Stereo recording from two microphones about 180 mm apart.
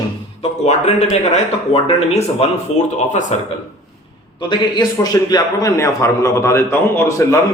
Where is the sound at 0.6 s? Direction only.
40° left (ahead or behind).